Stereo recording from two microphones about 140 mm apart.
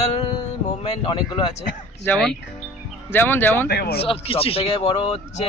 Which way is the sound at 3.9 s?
40° left (ahead or behind).